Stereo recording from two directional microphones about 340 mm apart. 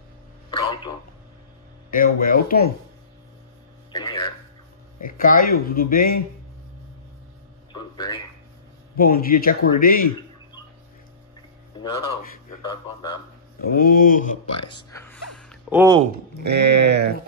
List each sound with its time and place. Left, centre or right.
0.5 s a sound: centre
1.9 s speech: left
3.9 s a sound: centre
5.0 s speech: left
7.7 s speech: centre
8.9 s speech: left
11.8 s speech: centre
13.7 s speech: left
14.8 s music: centre
15.7 s speech: centre
16.4 s sheep: right